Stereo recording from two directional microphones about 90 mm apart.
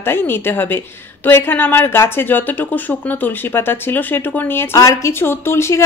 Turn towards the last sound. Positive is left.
turn(degrees=30)  # may be behind; listen again after turning